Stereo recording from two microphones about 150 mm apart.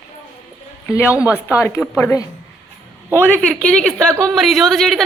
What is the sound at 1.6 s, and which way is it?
Speech, 15° left (ahead or behind).